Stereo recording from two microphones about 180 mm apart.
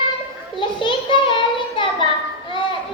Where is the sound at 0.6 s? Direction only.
30° left (ahead or behind).